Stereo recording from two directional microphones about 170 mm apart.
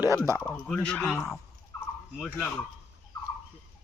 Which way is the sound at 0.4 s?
5° left (ahead or behind).